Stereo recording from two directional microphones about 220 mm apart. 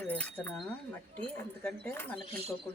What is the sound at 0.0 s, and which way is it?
Speech, 5° left (ahead or behind).